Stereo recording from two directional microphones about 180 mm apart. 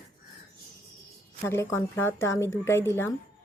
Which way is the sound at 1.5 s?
15° left (ahead or behind).